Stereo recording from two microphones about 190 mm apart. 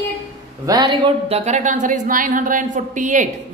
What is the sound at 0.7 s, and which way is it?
Speech, 25° right (ahead or behind).